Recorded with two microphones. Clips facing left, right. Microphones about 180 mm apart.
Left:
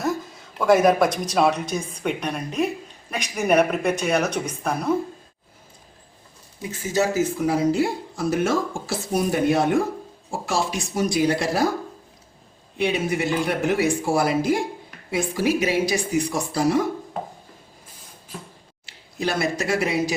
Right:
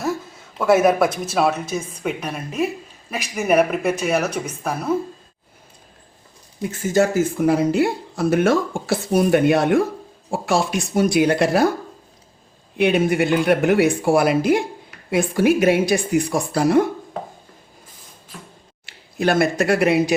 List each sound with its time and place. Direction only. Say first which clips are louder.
0.0 s a woman's voice: right 1 dB; 5° right (ahead or behind)
6.6 s speech: right 5 dB; 50° right (ahead or behind)
12.7 s speech: right 6 dB; 60° right (ahead or behind)
18.9 s speech: right 6 dB; 60° right (ahead or behind)